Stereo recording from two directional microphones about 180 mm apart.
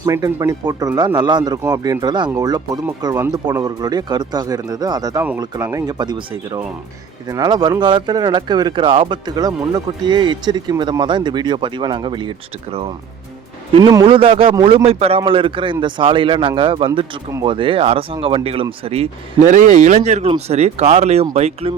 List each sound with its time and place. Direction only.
0.0 s speech: 15° right (ahead or behind)
13.7 s speech: 25° right (ahead or behind)